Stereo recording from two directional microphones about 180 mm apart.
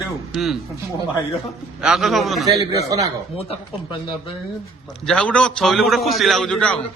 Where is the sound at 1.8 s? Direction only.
Centre (ahead or behind).